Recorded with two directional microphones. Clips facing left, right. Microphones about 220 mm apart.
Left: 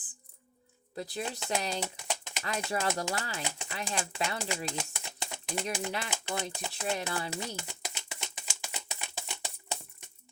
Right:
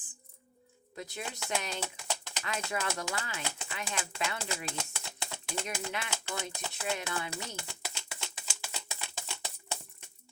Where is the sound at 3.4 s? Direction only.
15° left (ahead or behind).